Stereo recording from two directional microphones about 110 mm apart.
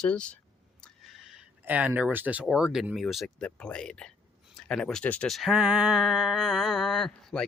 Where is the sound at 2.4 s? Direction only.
5° right (ahead or behind); by 5.2 s 10° left (ahead or behind).